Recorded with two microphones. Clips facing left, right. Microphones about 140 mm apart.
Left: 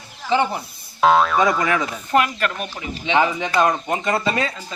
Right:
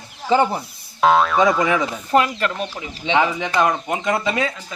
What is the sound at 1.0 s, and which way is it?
Speech, centre (ahead or behind).